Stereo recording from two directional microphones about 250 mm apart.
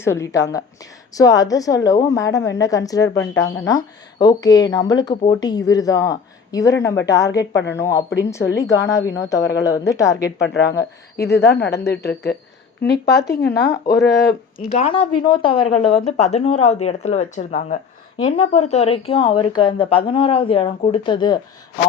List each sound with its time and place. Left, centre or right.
0.0 s a woman's voice: centre
7.5 s speech: left
7.8 s a woman's voice: centre
10.3 s speech: left
14.7 s speech: left